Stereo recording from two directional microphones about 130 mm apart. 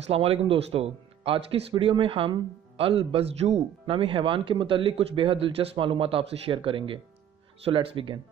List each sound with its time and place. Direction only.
0.1 s speech: 50° right (ahead or behind)